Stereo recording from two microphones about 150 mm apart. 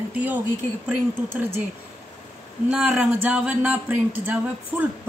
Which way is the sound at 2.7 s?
5° right (ahead or behind).